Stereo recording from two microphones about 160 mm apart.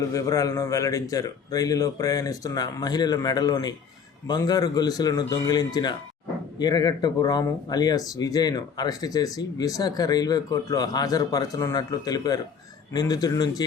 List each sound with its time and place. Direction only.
0.1 s speech: 20° left (ahead or behind)